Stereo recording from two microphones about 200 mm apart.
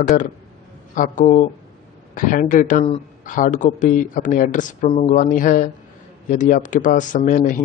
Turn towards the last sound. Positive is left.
turn(degrees=40)  # may be behind; listen again after turning